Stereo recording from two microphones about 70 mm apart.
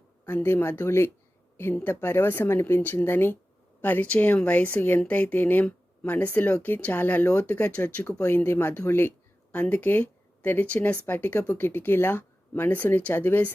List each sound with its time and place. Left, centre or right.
0.3 s speech: left